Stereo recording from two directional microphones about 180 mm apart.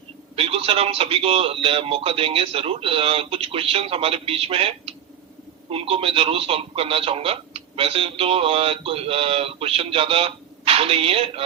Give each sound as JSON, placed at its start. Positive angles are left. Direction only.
{"t": 0.3, "sound": "a man's voice", "side_deg": -30}